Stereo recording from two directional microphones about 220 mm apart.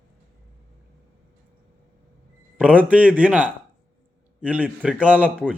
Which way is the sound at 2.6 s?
5° right (ahead or behind).